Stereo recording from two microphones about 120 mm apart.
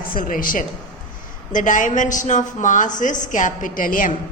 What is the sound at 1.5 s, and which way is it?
A woman's voice, 90° left.